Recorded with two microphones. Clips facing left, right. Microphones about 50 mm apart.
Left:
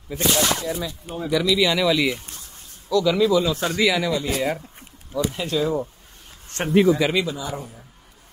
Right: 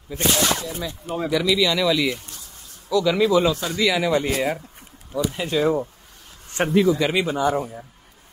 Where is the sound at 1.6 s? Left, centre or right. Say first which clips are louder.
Even; centre.